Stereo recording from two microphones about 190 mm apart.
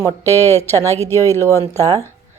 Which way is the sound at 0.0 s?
10° left (ahead or behind).